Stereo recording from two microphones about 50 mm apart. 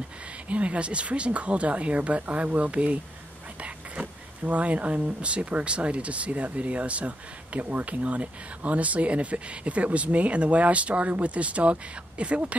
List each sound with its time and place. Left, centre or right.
0.5 s speech: right